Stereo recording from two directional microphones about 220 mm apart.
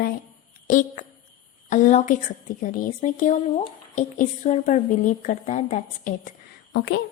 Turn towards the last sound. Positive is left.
turn(degrees=50)  # may be behind; listen again after turning